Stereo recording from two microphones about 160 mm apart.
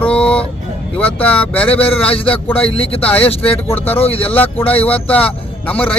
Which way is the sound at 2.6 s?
35° left (ahead or behind).